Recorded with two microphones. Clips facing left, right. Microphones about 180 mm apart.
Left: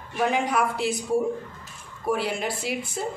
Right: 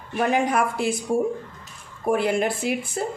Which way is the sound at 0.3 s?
50° right (ahead or behind).